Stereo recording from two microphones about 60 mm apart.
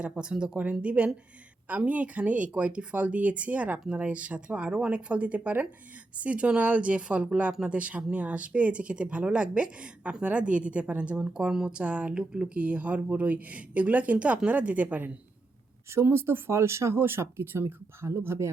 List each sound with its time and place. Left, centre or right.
0.1 s speech: centre
15.9 s speech: right